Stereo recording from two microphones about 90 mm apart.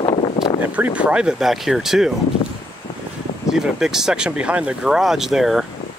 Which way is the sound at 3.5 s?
5° right (ahead or behind).